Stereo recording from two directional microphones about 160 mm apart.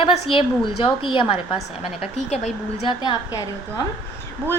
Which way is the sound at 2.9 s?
30° left (ahead or behind).